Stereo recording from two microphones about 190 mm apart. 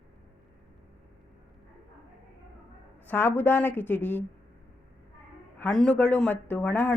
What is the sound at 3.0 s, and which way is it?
Speech, 10° left (ahead or behind).